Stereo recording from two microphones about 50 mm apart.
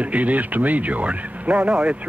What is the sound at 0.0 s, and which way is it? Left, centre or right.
Speech, right.